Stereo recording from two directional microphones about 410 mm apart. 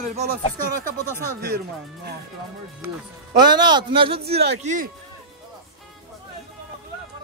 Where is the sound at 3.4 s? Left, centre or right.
Centre.